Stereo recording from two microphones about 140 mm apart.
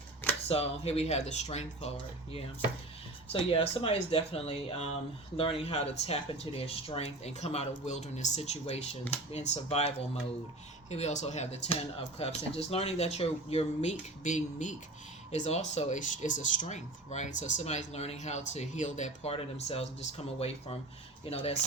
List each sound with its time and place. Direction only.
0.4 s speech: 45° left (ahead or behind)
3.3 s speech: 40° left (ahead or behind)